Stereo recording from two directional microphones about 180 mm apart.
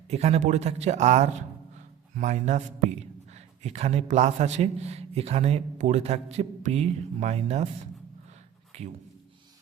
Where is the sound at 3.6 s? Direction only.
40° right (ahead or behind).